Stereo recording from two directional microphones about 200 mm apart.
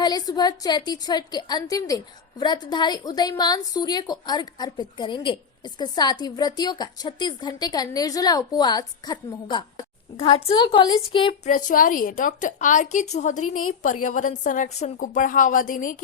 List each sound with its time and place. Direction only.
0.0 s a woman's voice: 20° left (ahead or behind)
11.4 s a woman's voice: 40° left (ahead or behind)
13.5 s a woman's voice: 90° left
13.8 s a woman's voice: 40° left (ahead or behind)